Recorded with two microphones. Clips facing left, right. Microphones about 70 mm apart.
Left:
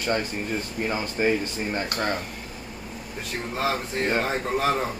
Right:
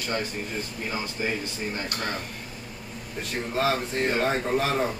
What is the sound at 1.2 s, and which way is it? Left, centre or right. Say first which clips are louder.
Speech: left 7 dB; left.